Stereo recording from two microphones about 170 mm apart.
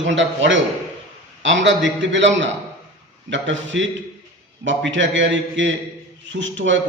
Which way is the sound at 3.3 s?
90° right.